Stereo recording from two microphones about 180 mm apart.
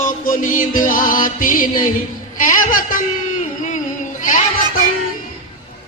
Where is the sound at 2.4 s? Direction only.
50° left (ahead or behind).